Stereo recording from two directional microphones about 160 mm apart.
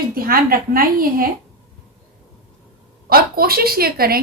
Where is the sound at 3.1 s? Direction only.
70° right (ahead or behind).